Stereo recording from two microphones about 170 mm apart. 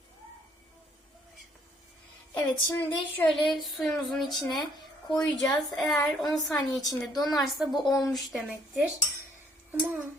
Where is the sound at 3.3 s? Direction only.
Centre (ahead or behind).